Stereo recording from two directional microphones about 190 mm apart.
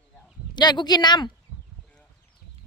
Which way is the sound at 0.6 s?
20° left (ahead or behind).